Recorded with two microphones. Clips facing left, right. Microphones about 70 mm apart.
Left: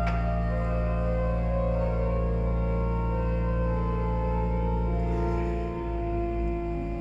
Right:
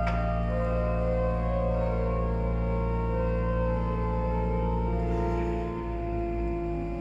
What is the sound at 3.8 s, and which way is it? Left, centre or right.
Music, centre.